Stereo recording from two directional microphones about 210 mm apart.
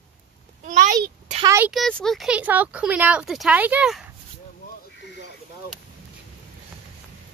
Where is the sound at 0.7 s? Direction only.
40° right (ahead or behind).